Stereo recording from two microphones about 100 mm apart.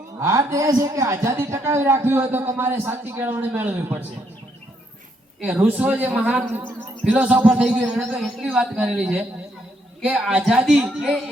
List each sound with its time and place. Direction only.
0.2 s a man's voice: 30° right (ahead or behind); by 4.0 s 15° right (ahead or behind)
5.4 s speech: 15° right (ahead or behind)
6.4 s a man's voice: 25° right (ahead or behind); by 11.2 s 5° right (ahead or behind)